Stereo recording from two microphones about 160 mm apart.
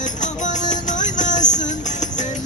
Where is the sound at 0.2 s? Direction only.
50° left (ahead or behind).